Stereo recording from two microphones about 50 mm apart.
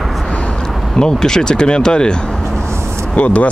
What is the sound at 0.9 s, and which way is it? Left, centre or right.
Speech, centre.